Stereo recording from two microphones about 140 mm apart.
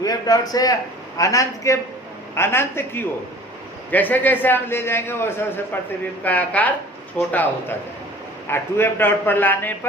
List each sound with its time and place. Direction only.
0.0 s a man's voice: 25° left (ahead or behind)